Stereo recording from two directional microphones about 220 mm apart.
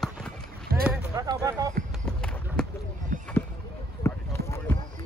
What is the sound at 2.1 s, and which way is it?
Run, 5° left (ahead or behind).